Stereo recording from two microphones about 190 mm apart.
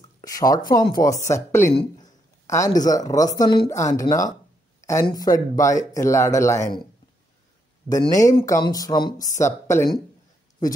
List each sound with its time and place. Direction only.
0.2 s speech: 20° left (ahead or behind)
7.9 s speech: 20° left (ahead or behind)